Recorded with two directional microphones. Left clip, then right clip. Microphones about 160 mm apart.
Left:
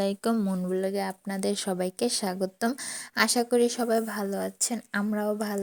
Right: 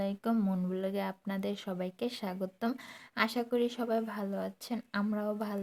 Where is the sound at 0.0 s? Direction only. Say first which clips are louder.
Left 7 dB; 40° left (ahead or behind).